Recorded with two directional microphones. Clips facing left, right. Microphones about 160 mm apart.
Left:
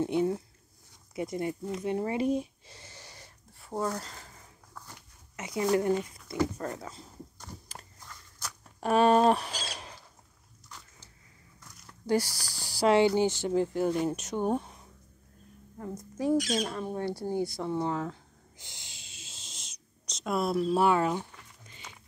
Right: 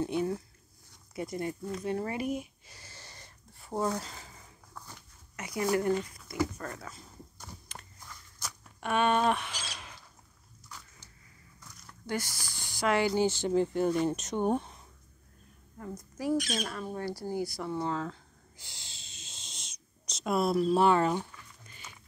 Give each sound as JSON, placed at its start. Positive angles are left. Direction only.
{"t": 0.0, "sound": "speech", "side_deg": 20}
{"t": 3.6, "sound": "speech", "side_deg": -10}
{"t": 5.3, "sound": "speech", "side_deg": 20}
{"t": 8.1, "sound": "walk", "side_deg": -10}
{"t": 8.8, "sound": "speech", "side_deg": 35}
{"t": 12.1, "sound": "speech", "side_deg": 35}
{"t": 13.1, "sound": "speech", "side_deg": 15}
{"t": 15.8, "sound": "speech", "side_deg": 25}
{"t": 17.4, "sound": "a sound", "side_deg": 20}
{"t": 21.6, "sound": "a sound", "side_deg": 20}